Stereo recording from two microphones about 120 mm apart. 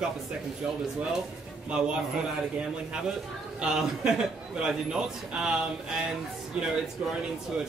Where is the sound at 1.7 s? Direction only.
5° right (ahead or behind).